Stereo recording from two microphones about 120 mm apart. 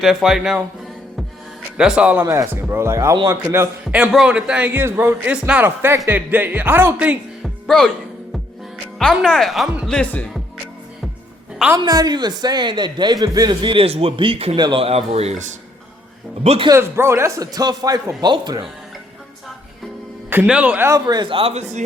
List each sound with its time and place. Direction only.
0.0 s speech: centre (ahead or behind)
1.8 s speech: 10° right (ahead or behind)
2.2 s speech: 20° right (ahead or behind)
3.8 s speech: 5° right (ahead or behind)
5.2 s speech: 10° right (ahead or behind)
7.4 s music: 5° left (ahead or behind)
9.0 s speech: 5° left (ahead or behind)
11.8 s a man's voice: 35° right (ahead or behind); by 14.5 s 55° right (ahead or behind)
14.5 s speech: 40° right (ahead or behind); by 15.5 s 75° right (ahead or behind)
16.4 s speech: 60° right (ahead or behind)
16.6 s speech: 25° right (ahead or behind)
20.5 s speech: 10° right (ahead or behind)
21.1 s a man's voice: 40° right (ahead or behind)
21.5 s a man's voice: 75° right (ahead or behind)